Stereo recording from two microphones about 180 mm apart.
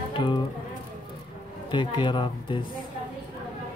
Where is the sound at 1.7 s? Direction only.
25° left (ahead or behind).